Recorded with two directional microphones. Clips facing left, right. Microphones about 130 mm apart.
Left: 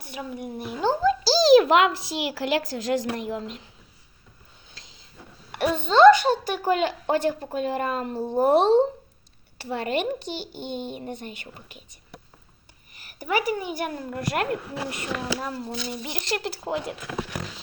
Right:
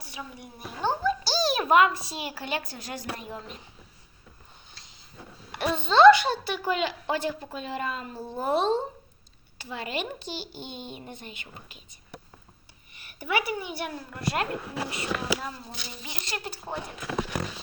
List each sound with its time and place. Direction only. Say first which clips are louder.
0.0 s a woman's voice: left 7 dB; 55° left (ahead or behind)
1.0 s speech: left 11 dB; 90° left
5.5 s a woman's voice: left 3 dB; 50° left (ahead or behind)
13.0 s a woman's voice: left 3 dB; 40° left (ahead or behind); by 16.9 s 90° left